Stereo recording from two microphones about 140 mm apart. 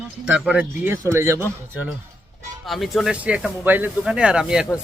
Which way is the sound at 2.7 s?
Centre (ahead or behind).